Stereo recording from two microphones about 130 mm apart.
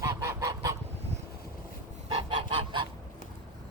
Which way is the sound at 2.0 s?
40° right (ahead or behind).